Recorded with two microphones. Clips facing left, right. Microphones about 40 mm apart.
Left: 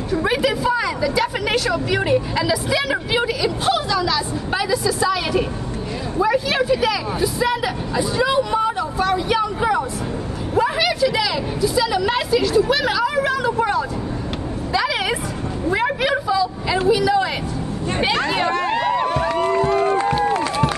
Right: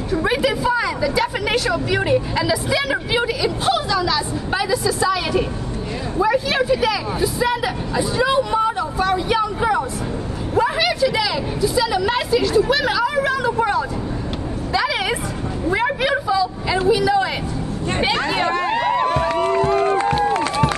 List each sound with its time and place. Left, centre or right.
0.1 s speech: centre
10.5 s vehicle: centre
14.7 s a sound: centre
16.8 s a man's voice: centre
18.0 s hubbub: centre
19.0 s run: right
20.3 s run: right